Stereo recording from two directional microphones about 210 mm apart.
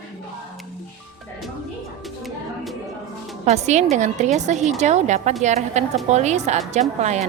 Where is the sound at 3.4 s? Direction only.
30° right (ahead or behind).